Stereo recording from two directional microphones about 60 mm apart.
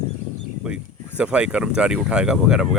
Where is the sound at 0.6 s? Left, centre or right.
Centre.